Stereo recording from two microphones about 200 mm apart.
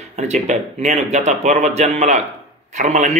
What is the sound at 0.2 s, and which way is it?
Speech, 35° right (ahead or behind).